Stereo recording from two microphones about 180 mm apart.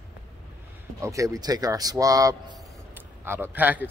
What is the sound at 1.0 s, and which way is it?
Speech, 15° right (ahead or behind).